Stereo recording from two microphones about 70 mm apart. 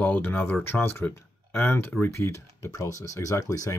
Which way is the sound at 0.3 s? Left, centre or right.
Left.